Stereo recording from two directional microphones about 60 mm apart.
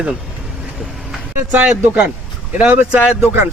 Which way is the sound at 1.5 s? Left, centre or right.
Right.